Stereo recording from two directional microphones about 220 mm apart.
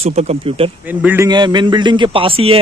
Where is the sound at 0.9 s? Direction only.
10° right (ahead or behind).